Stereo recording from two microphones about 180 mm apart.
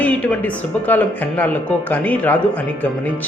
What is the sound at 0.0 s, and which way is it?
A man's voice, 10° left (ahead or behind).